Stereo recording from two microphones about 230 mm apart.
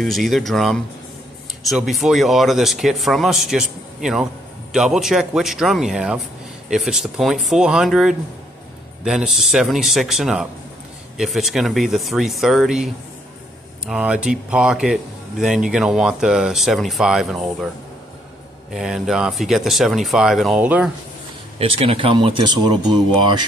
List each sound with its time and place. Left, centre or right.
0.0 s speech: centre
18.7 s speech: centre
21.5 s speech: right